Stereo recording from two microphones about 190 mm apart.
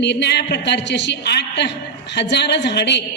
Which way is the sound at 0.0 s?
65° left (ahead or behind).